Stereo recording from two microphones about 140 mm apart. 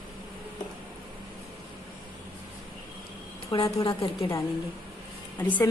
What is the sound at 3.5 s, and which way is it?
Speech, 30° left (ahead or behind).